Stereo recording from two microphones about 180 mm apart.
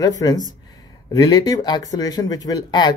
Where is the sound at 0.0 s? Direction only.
20° left (ahead or behind).